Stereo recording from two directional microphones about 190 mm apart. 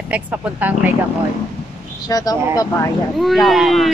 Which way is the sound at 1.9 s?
20° left (ahead or behind).